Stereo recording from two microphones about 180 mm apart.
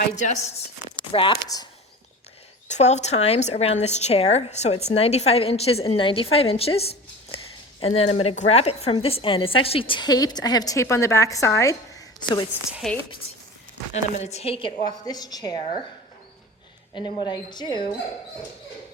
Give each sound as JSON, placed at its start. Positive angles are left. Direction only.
{"t": 0.0, "sound": "a woman's voice", "side_deg": 40}
{"t": 1.1, "sound": "a woman's voice", "side_deg": 25}
{"t": 2.6, "sound": "a woman's voice", "side_deg": 40}
{"t": 12.8, "sound": "a woman's voice", "side_deg": 0}
{"t": 13.9, "sound": "a woman's voice", "side_deg": 40}
{"t": 16.9, "sound": "a woman's voice", "side_deg": 25}